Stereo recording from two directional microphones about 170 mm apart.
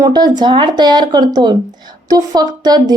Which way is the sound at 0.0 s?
25° right (ahead or behind).